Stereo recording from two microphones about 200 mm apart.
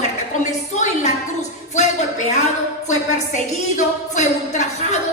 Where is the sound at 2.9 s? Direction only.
35° left (ahead or behind).